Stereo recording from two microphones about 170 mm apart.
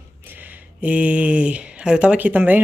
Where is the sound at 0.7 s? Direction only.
10° right (ahead or behind).